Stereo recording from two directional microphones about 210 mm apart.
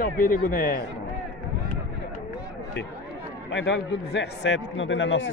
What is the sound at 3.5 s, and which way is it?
A man's voice, 60° left (ahead or behind).